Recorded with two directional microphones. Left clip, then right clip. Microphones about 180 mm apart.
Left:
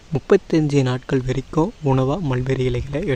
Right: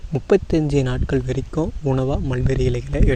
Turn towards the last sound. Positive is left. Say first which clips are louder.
# even
turn(degrees=0)  # may be behind; listen again after turning